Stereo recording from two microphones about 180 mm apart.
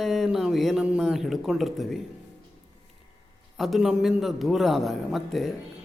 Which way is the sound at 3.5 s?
Centre (ahead or behind).